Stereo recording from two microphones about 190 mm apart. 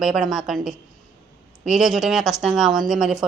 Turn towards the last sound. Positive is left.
turn(degrees=0)  # may be behind; listen again after turning